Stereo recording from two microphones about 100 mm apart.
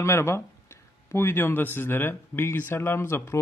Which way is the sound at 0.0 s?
25° left (ahead or behind).